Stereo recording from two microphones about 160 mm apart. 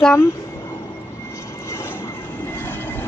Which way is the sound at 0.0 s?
15° left (ahead or behind).